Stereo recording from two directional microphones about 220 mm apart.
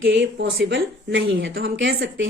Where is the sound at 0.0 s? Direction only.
55° right (ahead or behind).